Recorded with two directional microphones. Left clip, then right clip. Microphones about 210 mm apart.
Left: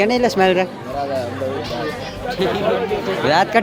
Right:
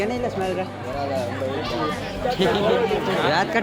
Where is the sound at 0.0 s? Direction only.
30° left (ahead or behind).